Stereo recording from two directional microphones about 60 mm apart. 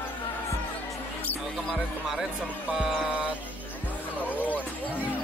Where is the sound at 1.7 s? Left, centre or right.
Centre.